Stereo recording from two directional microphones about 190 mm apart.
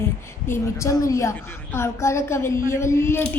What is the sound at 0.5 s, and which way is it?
A child's voice, 15° left (ahead or behind).